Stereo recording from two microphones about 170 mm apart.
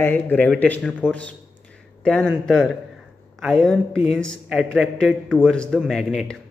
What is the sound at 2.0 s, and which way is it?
A woman's voice, 5° left (ahead or behind).